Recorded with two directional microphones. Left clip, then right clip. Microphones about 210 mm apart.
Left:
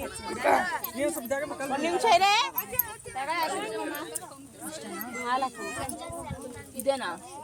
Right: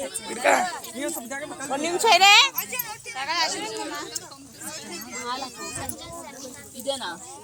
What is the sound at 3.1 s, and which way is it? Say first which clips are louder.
Speech: right 4 dB; 10° left (ahead or behind).